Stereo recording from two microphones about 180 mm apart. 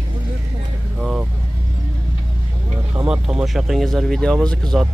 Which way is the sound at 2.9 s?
5° right (ahead or behind).